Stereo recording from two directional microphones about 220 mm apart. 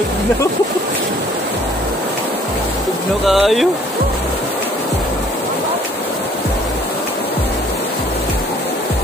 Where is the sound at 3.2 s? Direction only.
Centre (ahead or behind).